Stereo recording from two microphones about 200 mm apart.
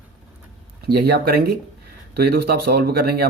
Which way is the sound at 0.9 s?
50° right (ahead or behind).